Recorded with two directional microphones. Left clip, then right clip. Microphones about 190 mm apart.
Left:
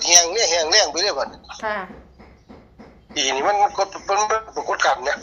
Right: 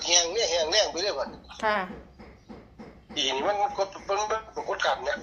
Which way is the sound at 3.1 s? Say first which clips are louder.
Left 8 dB; 55° left (ahead or behind).